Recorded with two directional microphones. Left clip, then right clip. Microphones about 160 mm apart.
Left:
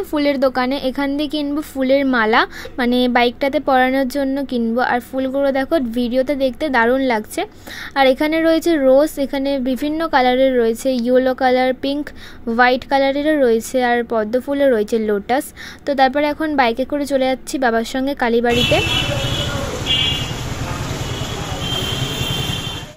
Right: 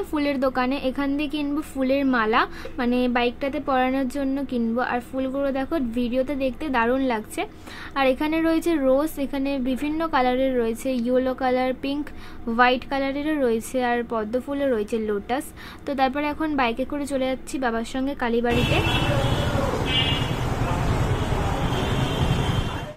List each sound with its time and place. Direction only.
0.1 s a woman's voice: 35° left (ahead or behind)